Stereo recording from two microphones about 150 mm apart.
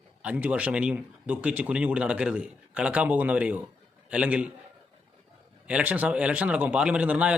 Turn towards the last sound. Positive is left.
turn(degrees=-10)  # may be behind; listen again after turning